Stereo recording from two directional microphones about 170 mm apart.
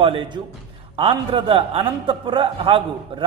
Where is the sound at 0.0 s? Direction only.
30° right (ahead or behind).